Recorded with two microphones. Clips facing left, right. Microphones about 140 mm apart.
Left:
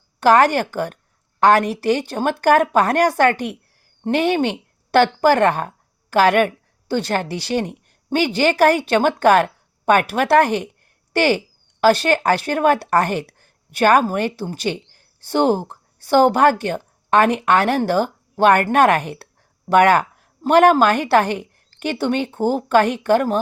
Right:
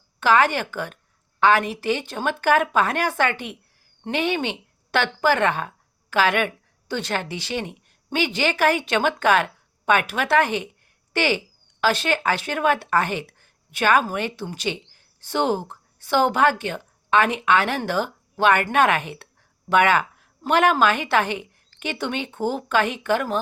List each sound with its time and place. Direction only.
0.2 s a woman's voice: 40° left (ahead or behind)